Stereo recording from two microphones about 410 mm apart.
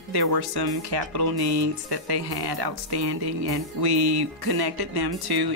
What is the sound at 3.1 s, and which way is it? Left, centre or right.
Music, right.